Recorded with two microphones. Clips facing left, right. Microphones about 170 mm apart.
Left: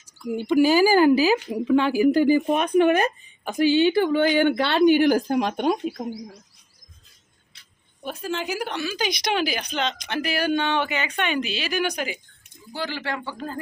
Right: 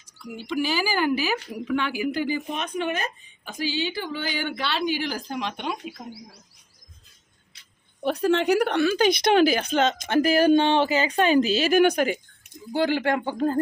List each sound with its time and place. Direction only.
0.4 s speech: 45° left (ahead or behind)
1.5 s a woman's voice: 25° left (ahead or behind); by 5.9 s 45° left (ahead or behind)
8.0 s a woman's voice: 70° right (ahead or behind); by 13.6 s 50° right (ahead or behind)